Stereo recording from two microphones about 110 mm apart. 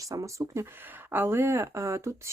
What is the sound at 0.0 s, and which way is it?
Speech, 30° right (ahead or behind).